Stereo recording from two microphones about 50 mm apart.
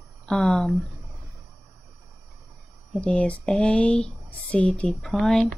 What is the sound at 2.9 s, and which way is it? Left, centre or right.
Speech, left.